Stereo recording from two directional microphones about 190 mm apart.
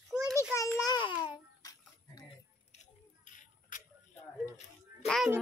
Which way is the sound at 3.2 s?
40° left (ahead or behind).